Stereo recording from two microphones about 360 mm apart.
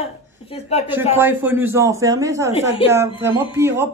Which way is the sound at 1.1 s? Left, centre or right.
Centre.